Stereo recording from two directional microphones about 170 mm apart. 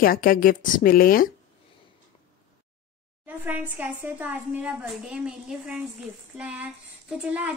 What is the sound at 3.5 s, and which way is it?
A woman's voice, 10° right (ahead or behind).